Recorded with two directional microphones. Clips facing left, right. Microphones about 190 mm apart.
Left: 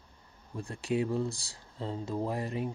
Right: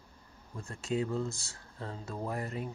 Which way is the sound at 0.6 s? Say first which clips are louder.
Left 3 dB; 15° left (ahead or behind).